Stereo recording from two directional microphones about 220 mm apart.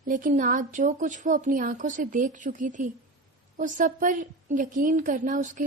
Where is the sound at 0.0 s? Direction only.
35° right (ahead or behind).